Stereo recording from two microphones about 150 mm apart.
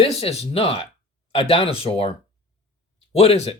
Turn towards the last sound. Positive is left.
turn(degrees=45)  # may be behind; listen again after turning